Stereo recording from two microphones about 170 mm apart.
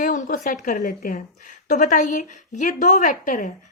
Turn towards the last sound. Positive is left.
turn(degrees=50)  # may be behind; listen again after turning